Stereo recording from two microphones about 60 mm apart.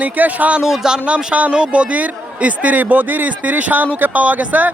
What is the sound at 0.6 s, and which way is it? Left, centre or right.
A man's voice, centre.